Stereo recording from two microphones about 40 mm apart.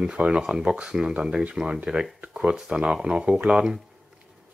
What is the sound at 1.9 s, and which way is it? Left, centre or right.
Speech, right.